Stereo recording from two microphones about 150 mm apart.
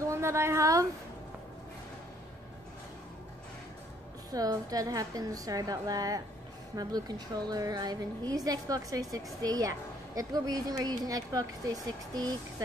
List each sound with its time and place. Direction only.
0.1 s speech: 20° right (ahead or behind)
4.3 s a woman's voice: 25° right (ahead or behind)